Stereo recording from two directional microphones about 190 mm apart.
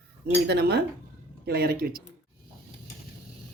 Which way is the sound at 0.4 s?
60° right (ahead or behind).